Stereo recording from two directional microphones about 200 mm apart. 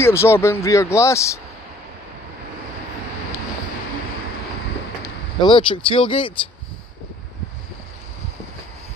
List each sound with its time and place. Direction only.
0.0 s speech: 10° left (ahead or behind)
5.0 s speech: 25° left (ahead or behind)